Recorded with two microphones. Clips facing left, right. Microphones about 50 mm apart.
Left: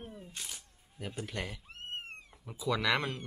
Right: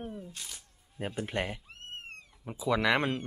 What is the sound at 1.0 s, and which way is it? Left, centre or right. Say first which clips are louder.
Speech: right 6 dB; right.